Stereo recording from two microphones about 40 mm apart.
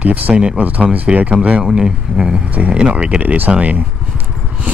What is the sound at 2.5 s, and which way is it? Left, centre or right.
Speech, right.